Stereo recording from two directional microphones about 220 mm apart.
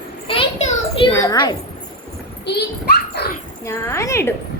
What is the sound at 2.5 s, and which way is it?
Speech, 45° left (ahead or behind).